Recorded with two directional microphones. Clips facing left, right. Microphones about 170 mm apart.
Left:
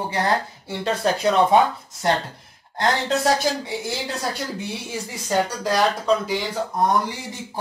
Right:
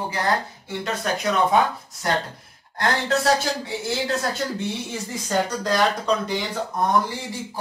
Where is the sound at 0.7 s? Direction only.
30° left (ahead or behind).